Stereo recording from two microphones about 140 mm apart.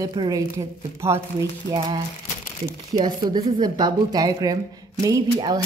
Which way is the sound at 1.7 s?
40° right (ahead or behind).